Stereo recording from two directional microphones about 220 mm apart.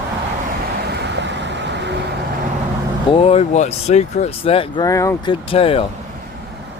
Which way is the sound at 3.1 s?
25° left (ahead or behind).